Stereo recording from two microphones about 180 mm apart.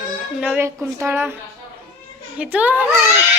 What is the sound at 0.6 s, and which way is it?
Speech, 15° right (ahead or behind).